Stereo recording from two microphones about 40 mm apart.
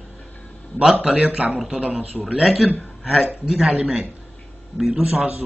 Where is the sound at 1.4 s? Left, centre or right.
Right.